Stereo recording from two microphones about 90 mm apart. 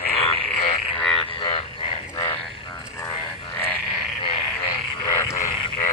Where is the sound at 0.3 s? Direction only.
90° left.